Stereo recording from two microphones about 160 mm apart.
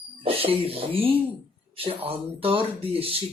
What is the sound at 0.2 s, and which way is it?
Speech, 35° right (ahead or behind).